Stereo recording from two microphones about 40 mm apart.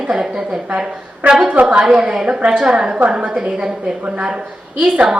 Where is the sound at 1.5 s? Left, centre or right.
Right.